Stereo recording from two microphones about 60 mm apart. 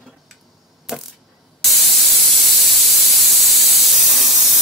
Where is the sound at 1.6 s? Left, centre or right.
Centre.